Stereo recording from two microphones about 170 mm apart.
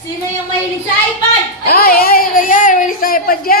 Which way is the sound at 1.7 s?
60° left (ahead or behind).